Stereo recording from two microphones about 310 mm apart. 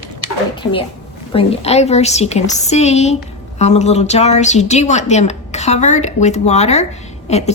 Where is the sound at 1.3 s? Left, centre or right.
Centre.